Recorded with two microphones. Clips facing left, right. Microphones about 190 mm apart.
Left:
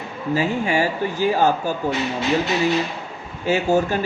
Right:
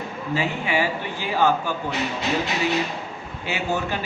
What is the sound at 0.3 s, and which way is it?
Speech, 45° left (ahead or behind).